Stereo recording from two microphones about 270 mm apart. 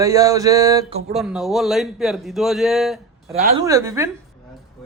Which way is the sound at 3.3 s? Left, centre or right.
Right.